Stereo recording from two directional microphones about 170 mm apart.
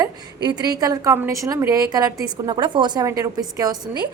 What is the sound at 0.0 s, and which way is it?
A woman's voice, 20° right (ahead or behind).